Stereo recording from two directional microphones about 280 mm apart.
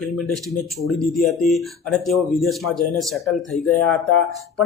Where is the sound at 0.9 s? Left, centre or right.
Centre.